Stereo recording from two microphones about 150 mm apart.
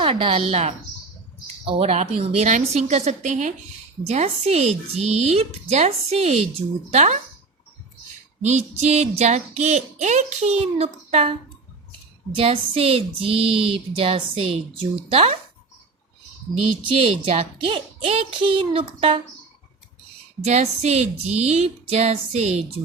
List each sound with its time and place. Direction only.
0.0 s speech: 35° right (ahead or behind)
1.6 s music: 40° right (ahead or behind)
8.4 s music: 50° right (ahead or behind)
12.3 s speech: 40° right (ahead or behind)
16.8 s speech: 40° right (ahead or behind)
20.4 s music: 45° right (ahead or behind)